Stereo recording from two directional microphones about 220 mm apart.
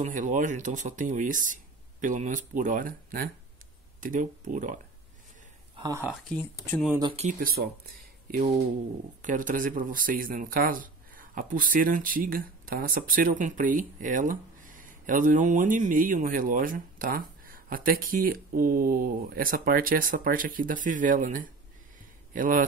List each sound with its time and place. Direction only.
0.0 s speech: 35° right (ahead or behind)
5.8 s speech: 15° right (ahead or behind)
6.0 s speech: centre (ahead or behind)
6.9 s speech: 20° right (ahead or behind)
7.3 s speech: 45° right (ahead or behind)